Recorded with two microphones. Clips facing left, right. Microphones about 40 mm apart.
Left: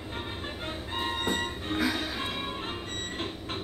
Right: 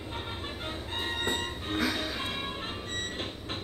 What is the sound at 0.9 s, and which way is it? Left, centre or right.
Music, centre.